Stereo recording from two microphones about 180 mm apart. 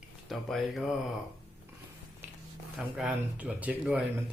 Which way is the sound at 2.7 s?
5° right (ahead or behind).